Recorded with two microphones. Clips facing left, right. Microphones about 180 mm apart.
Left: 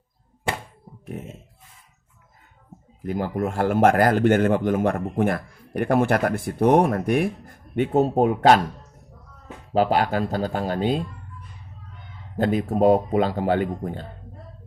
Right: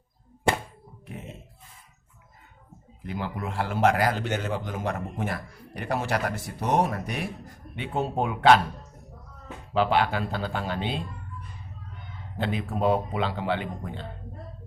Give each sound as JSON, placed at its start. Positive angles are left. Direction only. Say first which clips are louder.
{"t": 3.0, "sound": "a man's voice", "louder": "left 8 dB", "side_deg": 45}
{"t": 9.7, "sound": "speech", "louder": "left 3 dB", "side_deg": 40}
{"t": 12.4, "sound": "a man's voice", "louder": "left 7 dB", "side_deg": 45}